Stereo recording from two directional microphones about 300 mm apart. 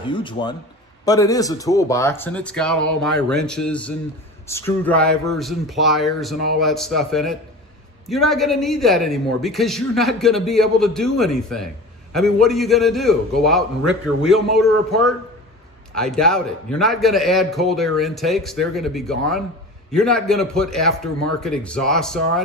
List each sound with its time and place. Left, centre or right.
0.0 s a man's voice: centre